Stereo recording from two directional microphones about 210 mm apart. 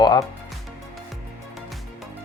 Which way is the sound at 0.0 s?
20° left (ahead or behind).